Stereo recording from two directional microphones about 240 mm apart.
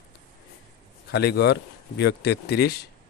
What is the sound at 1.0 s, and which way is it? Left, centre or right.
Speech, left.